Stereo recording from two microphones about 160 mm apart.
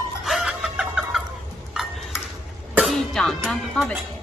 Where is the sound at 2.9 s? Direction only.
Centre (ahead or behind).